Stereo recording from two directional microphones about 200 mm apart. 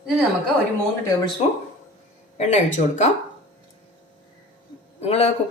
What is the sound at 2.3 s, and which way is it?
Speech, 35° left (ahead or behind).